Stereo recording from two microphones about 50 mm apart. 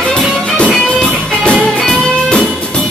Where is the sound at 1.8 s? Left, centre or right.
Centre.